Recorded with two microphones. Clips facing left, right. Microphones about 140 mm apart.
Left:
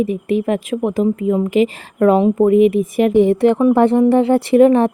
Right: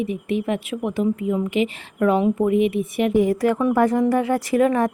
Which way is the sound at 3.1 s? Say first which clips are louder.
Left 6 dB; 30° left (ahead or behind).